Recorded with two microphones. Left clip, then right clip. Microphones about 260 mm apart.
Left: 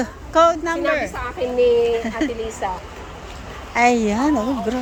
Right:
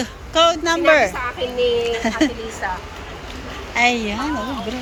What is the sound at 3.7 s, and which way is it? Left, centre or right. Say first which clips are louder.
Speech: left 1 dB; left.